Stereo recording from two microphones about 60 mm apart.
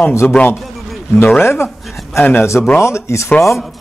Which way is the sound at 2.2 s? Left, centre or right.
Left.